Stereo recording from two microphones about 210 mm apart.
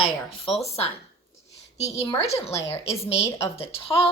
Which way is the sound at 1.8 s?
30° left (ahead or behind).